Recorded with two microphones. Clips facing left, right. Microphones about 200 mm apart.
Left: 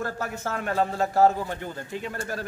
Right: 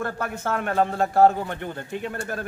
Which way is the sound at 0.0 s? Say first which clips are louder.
Right 2 dB; 55° right (ahead or behind).